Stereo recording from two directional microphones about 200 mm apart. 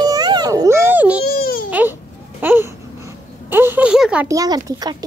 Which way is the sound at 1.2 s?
50° left (ahead or behind).